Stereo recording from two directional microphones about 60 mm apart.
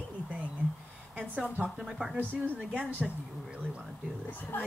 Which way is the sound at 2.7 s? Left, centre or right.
Right.